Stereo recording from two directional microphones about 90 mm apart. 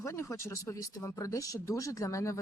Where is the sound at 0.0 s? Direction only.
35° left (ahead or behind).